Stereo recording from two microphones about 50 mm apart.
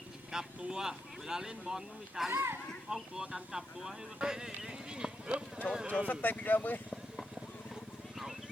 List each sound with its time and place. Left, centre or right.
0.3 s speech: centre
2.3 s speech: right
3.2 s speech: centre
6.1 s speech: left